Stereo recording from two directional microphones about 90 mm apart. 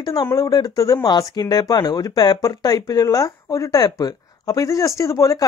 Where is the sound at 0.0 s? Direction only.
50° left (ahead or behind).